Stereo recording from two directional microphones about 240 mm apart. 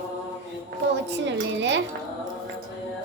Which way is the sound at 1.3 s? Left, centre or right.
Right.